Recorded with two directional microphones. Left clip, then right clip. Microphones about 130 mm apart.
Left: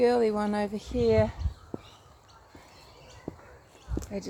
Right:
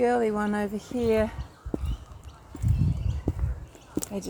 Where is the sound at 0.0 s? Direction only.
45° left (ahead or behind).